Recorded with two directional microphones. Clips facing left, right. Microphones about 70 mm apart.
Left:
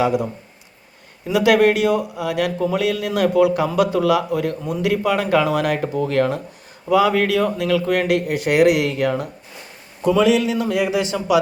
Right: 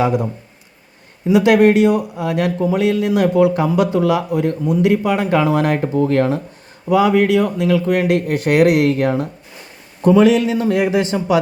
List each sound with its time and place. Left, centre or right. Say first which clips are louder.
1.3 s a man's voice: right 3 dB; right
8.3 s a man's voice: right 2 dB; right